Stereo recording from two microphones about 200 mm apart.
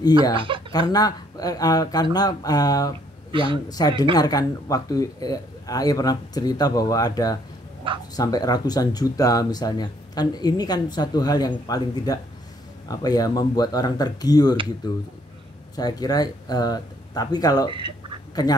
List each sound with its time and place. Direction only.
0.3 s speech: 25° right (ahead or behind)
0.7 s speech: 20° left (ahead or behind)
3.3 s speech: 25° right (ahead or behind)
3.6 s speech: 20° left (ahead or behind)
7.8 s speech: 25° right (ahead or behind)
8.2 s speech: 20° left (ahead or behind)
15.7 s speech: 20° left (ahead or behind)